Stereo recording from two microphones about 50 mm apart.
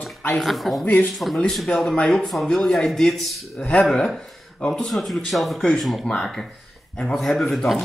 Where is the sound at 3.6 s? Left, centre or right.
Left.